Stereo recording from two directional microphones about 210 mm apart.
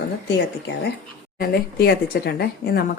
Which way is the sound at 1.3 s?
45° left (ahead or behind).